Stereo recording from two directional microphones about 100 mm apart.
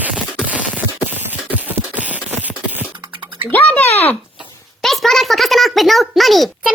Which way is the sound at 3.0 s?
50° right (ahead or behind).